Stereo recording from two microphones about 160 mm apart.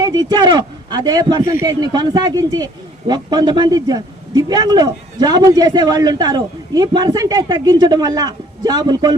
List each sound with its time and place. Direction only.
0.0 s a man's voice: 25° right (ahead or behind)